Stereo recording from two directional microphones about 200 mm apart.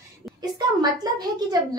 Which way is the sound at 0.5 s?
20° right (ahead or behind).